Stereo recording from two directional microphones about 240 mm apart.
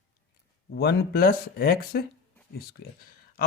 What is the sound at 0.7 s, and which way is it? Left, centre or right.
Speech, left.